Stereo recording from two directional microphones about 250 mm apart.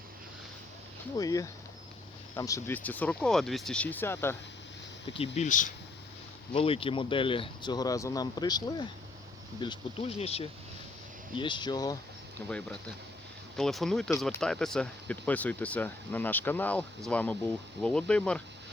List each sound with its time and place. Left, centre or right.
1.1 s speech: centre
5.1 s speech: left
12.5 s speech: centre